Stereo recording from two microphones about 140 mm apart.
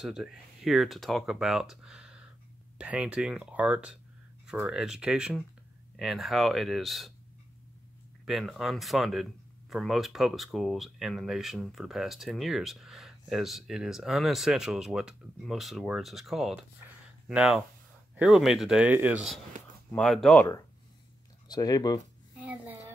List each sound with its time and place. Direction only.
0.0 s speech: 5° right (ahead or behind)
8.3 s speech: centre (ahead or behind)
19.9 s speech: 5° left (ahead or behind)
21.5 s speech: 30° left (ahead or behind)
22.4 s a sound: 10° right (ahead or behind)